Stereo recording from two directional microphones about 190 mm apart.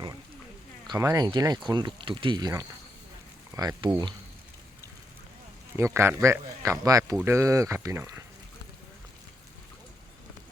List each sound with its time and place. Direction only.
0.9 s speech: 20° right (ahead or behind)
5.7 s speech: 15° right (ahead or behind)